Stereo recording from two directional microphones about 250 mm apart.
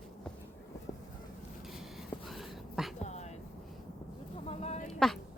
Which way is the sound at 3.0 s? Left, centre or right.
Left.